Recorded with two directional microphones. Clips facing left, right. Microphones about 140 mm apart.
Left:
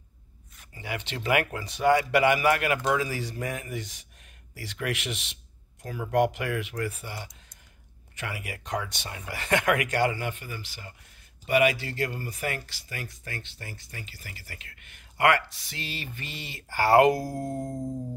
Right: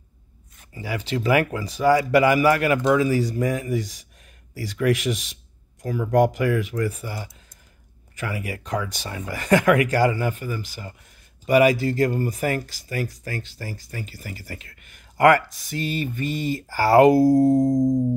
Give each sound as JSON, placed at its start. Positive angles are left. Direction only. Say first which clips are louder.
{"t": 0.6, "sound": "speech", "louder": "right 5 dB", "side_deg": -35}